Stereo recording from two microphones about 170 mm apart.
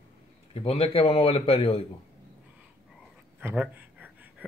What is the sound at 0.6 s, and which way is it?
Speech, 35° left (ahead or behind).